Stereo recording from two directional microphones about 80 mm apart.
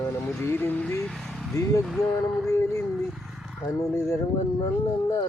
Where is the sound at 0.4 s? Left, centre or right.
Left.